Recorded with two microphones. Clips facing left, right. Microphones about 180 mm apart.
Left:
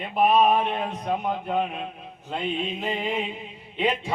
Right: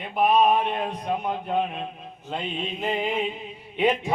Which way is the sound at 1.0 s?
Centre (ahead or behind).